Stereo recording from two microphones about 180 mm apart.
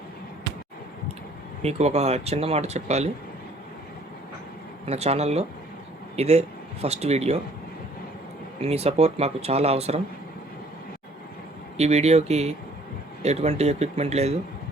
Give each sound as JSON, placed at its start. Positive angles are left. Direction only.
{"t": 1.6, "sound": "speech", "side_deg": -35}
{"t": 4.9, "sound": "speech", "side_deg": -35}
{"t": 8.6, "sound": "speech", "side_deg": -35}
{"t": 11.8, "sound": "speech", "side_deg": -35}